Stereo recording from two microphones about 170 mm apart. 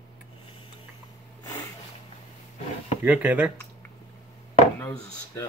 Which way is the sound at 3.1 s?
5° right (ahead or behind).